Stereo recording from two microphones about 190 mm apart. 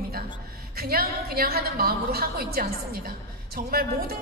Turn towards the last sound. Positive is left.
turn(degrees=-50)  # may be behind; listen again after turning